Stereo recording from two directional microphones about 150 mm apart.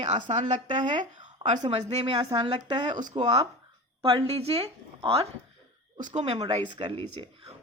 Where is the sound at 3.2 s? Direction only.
45° right (ahead or behind).